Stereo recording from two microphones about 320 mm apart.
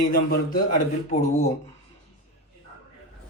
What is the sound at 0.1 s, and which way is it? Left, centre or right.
A man's voice, left.